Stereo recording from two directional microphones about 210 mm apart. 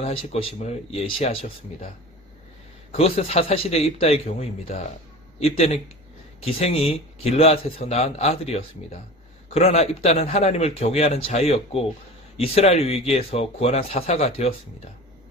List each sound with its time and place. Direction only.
0.0 s a man's voice: 30° left (ahead or behind)
2.9 s a man's voice: 30° left (ahead or behind)